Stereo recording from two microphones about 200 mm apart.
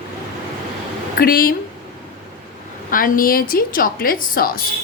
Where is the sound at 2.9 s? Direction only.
45° left (ahead or behind).